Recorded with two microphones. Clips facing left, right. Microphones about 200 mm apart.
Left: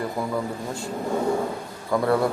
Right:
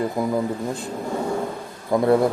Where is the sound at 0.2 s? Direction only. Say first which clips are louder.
Right 5 dB; 20° right (ahead or behind).